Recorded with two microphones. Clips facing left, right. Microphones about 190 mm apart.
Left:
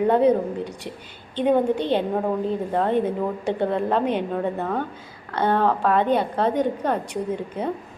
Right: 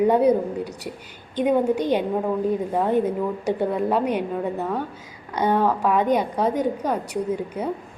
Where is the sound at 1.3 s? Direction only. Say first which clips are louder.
Even; 10° right (ahead or behind).